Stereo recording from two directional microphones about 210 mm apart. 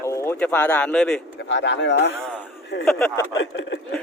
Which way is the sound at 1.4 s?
60° left (ahead or behind).